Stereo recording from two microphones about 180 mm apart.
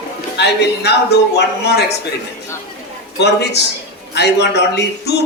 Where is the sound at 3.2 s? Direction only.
70° left (ahead or behind).